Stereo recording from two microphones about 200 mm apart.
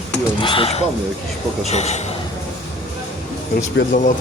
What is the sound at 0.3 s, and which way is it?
Speech, 25° left (ahead or behind).